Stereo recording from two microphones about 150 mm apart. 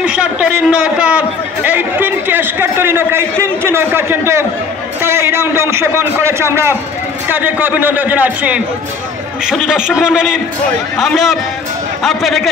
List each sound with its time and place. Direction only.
0.0 s a man's voice: 10° right (ahead or behind)